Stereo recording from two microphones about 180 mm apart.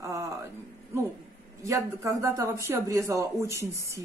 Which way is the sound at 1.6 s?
15° right (ahead or behind).